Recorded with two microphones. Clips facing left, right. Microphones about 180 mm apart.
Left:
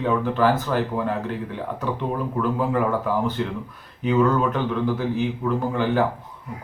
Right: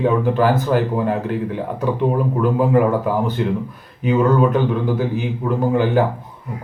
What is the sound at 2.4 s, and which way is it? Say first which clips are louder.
Speech: right 6 dB; 10° right (ahead or behind).